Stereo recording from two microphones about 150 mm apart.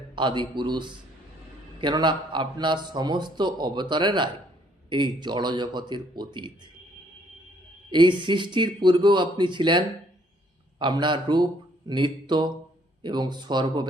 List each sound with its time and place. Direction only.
0.2 s a man's voice: 30° right (ahead or behind)
7.9 s a man's voice: 30° right (ahead or behind)